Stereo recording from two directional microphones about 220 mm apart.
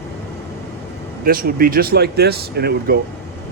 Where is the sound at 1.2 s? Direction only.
40° right (ahead or behind).